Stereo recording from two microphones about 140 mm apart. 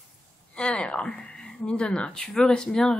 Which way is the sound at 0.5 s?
5° left (ahead or behind).